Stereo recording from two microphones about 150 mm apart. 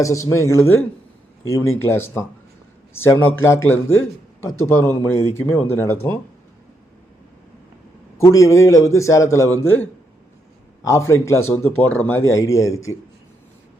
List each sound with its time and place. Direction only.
0.0 s a man's voice: 20° left (ahead or behind)
8.2 s a man's voice: 20° left (ahead or behind)